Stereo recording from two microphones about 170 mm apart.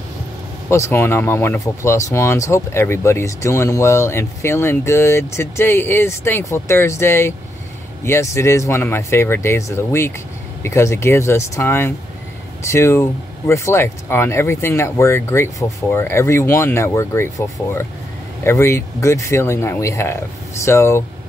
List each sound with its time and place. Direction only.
0.7 s speech: 15° left (ahead or behind)